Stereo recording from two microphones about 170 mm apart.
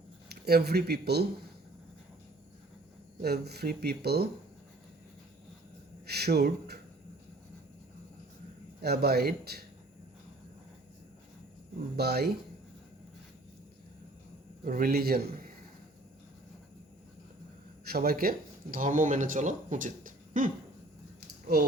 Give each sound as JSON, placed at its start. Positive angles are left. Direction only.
{"t": 0.4, "sound": "speech", "side_deg": -70}
{"t": 3.2, "sound": "speech", "side_deg": -70}
{"t": 6.1, "sound": "speech", "side_deg": -70}
{"t": 8.8, "sound": "speech", "side_deg": -70}
{"t": 11.9, "sound": "speech", "side_deg": -70}
{"t": 14.6, "sound": "a man's voice", "side_deg": -60}
{"t": 17.8, "sound": "speech", "side_deg": -65}